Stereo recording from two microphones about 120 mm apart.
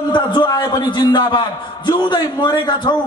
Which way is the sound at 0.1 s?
40° left (ahead or behind).